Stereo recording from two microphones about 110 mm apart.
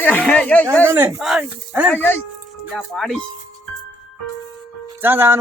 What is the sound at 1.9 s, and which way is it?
Speech, 20° left (ahead or behind).